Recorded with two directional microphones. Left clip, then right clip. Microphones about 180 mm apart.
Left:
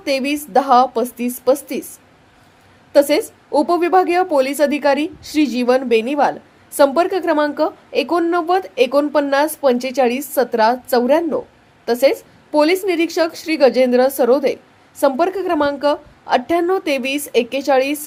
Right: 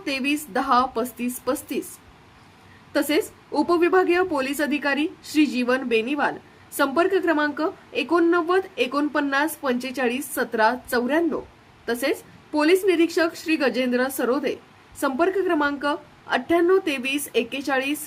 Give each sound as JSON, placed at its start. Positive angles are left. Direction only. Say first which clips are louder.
{"t": 0.0, "sound": "a woman's voice", "louder": "left 6 dB", "side_deg": 15}
{"t": 2.9, "sound": "a woman's voice", "louder": "left 9 dB", "side_deg": 15}